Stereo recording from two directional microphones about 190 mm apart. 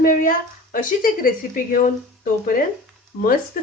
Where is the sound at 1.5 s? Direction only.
45° left (ahead or behind).